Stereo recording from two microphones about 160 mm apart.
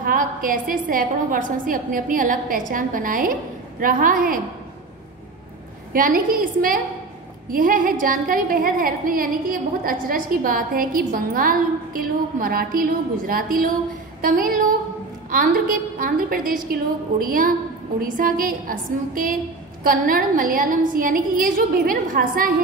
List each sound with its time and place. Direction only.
0.0 s a woman's voice: 60° right (ahead or behind)
5.9 s a woman's voice: 60° right (ahead or behind)